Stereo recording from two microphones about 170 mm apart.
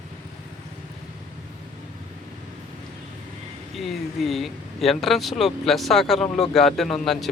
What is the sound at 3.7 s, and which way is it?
Speech, centre (ahead or behind).